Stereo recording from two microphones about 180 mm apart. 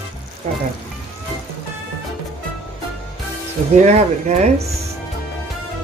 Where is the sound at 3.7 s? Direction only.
40° right (ahead or behind).